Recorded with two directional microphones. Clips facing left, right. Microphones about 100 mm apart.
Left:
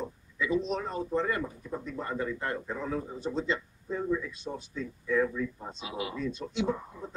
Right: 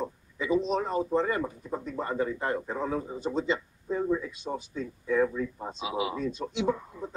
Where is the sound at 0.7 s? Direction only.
15° right (ahead or behind).